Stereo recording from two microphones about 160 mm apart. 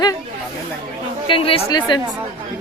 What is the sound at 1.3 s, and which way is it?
Speech, 35° left (ahead or behind).